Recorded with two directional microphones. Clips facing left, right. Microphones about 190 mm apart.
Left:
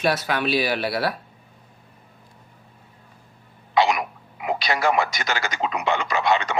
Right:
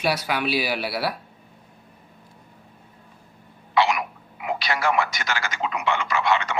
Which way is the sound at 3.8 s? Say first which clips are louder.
Left 2 dB; 25° left (ahead or behind).